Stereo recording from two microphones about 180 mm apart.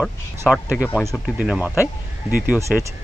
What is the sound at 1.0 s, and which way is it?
Speech, centre (ahead or behind).